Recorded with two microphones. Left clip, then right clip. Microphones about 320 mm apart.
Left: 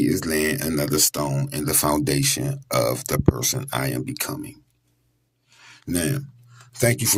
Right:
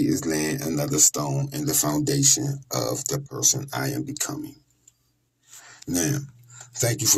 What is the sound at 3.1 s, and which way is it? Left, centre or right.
Speech, left.